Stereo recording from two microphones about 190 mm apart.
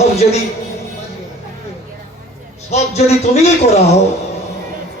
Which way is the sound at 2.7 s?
35° left (ahead or behind).